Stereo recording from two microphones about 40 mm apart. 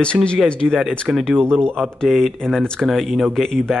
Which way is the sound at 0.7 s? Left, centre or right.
Right.